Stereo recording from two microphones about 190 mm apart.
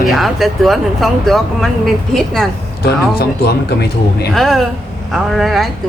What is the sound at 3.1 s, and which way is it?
Speech, 55° left (ahead or behind).